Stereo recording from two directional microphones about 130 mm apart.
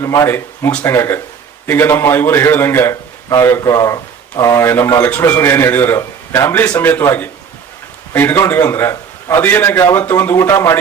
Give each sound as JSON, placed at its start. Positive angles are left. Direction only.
{"t": 0.0, "sound": "a man's voice", "side_deg": 25}